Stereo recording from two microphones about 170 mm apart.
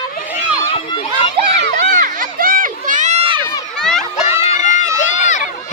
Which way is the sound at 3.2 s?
30° right (ahead or behind).